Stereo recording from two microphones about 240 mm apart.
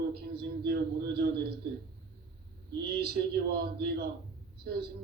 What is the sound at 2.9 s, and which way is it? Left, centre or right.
A man's voice, right.